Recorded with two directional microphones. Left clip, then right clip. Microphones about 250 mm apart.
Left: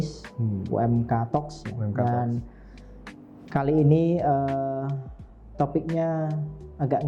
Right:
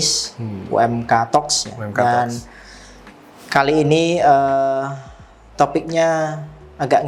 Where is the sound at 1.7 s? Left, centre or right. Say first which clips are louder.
Right 10 dB; centre.